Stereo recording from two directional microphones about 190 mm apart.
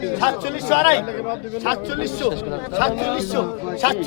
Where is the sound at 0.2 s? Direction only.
45° left (ahead or behind).